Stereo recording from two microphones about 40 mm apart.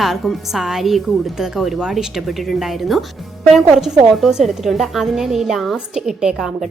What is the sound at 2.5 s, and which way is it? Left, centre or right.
A woman's voice, centre.